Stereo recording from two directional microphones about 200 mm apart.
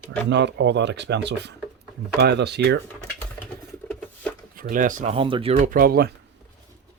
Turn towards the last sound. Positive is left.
turn(degrees=-45)  # may be behind; listen again after turning